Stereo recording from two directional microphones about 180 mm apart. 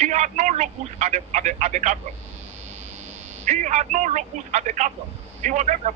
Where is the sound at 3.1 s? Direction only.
40° right (ahead or behind).